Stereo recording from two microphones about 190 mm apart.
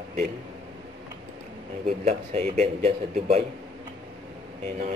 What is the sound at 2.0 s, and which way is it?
A man's voice, 35° right (ahead or behind).